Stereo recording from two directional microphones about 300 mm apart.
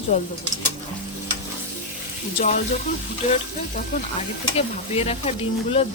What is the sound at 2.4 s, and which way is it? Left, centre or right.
Speech, left.